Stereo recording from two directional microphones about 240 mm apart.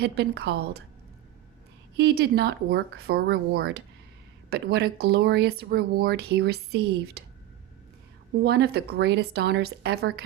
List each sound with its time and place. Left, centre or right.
0.0 s speech: right
2.0 s speech: right
8.4 s speech: right